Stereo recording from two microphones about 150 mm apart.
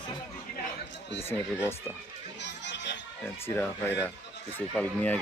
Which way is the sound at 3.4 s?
15° left (ahead or behind).